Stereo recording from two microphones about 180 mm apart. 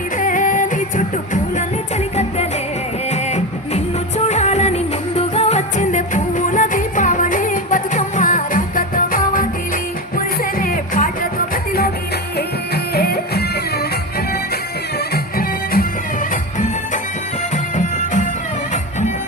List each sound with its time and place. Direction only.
0.2 s music: 45° left (ahead or behind)
3.1 s music: 40° left (ahead or behind); by 13.8 s 60° left (ahead or behind)
14.9 s music: 55° left (ahead or behind)
16.3 s music: 45° left (ahead or behind)